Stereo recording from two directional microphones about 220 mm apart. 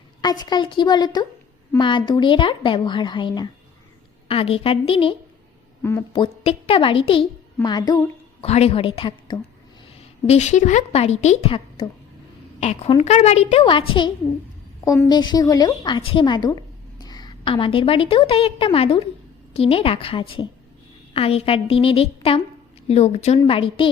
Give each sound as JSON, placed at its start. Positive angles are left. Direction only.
{"t": 0.2, "sound": "a woman's voice", "side_deg": 20}
{"t": 5.8, "sound": "speech", "side_deg": 10}
{"t": 6.2, "sound": "a woman's voice", "side_deg": 25}
{"t": 8.4, "sound": "a woman's voice", "side_deg": 30}